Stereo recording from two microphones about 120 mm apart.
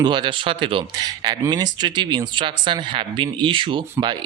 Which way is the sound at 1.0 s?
35° right (ahead or behind).